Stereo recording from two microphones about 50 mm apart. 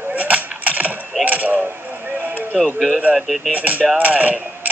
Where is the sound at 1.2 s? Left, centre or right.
Right.